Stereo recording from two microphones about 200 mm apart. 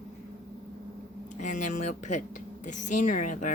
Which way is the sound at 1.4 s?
40° left (ahead or behind).